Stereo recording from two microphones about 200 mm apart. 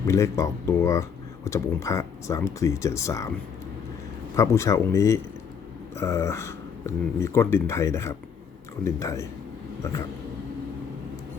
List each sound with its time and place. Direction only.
0.0 s speech: 15° left (ahead or behind)
4.4 s speech: 15° left (ahead or behind)